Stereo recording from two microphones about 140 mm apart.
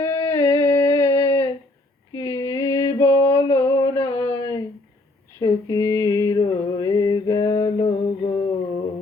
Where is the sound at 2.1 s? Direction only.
25° left (ahead or behind).